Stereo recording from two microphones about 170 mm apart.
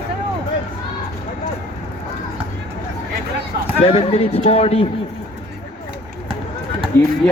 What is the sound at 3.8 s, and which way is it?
A man's voice, 35° left (ahead or behind).